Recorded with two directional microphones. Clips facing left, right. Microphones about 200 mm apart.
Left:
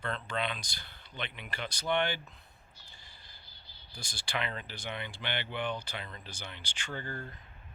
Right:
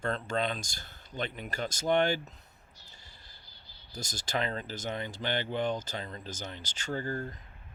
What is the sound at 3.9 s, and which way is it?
Speech, 40° right (ahead or behind).